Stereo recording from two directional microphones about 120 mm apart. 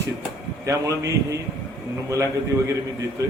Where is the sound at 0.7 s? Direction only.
30° right (ahead or behind).